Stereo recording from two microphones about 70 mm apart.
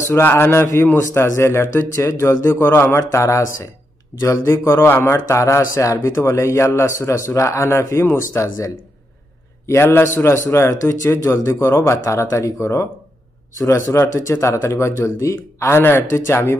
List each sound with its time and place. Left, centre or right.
0.0 s speech: left
3.0 s a man's voice: left